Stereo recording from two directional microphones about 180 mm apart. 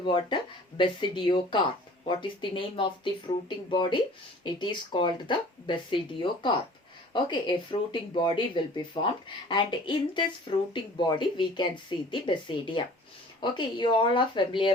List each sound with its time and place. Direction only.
0.0 s speech: 25° left (ahead or behind)